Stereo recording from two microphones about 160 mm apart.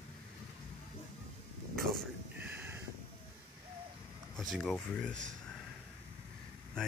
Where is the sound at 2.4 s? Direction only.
15° right (ahead or behind).